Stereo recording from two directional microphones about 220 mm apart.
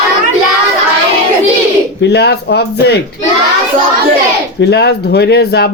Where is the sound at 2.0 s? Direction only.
50° left (ahead or behind).